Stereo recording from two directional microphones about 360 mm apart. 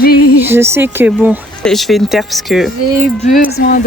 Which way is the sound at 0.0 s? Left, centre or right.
Left.